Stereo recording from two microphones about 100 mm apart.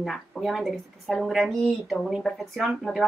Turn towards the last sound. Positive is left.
turn(degrees=0)  # may be behind; listen again after turning